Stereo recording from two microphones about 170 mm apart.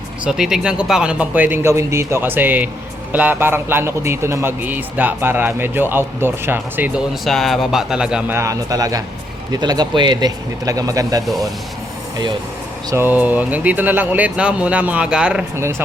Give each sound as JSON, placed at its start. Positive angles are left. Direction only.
{"t": 0.3, "sound": "a man's voice", "side_deg": -5}
{"t": 7.3, "sound": "speech", "side_deg": 0}
{"t": 8.4, "sound": "speech", "side_deg": -20}
{"t": 12.9, "sound": "a man's voice", "side_deg": -10}